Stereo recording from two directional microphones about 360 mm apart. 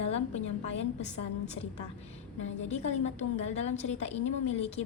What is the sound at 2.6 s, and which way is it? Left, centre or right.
A woman's voice, centre.